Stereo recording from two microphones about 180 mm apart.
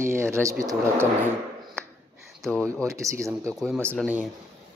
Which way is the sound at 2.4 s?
5° left (ahead or behind).